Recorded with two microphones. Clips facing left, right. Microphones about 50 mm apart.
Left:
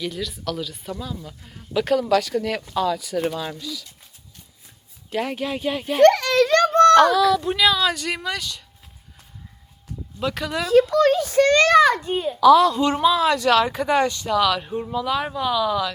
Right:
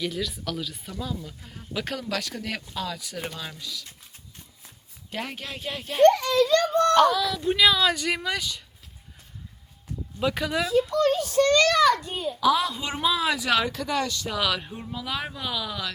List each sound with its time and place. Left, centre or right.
0.0 s speech: centre
5.1 s speech: centre
6.0 s children playing: left
7.3 s speech: centre
10.2 s speech: centre
10.7 s speech: left
11.5 s a sound: left
12.4 s speech: centre
13.7 s speech: left
14.3 s speech: centre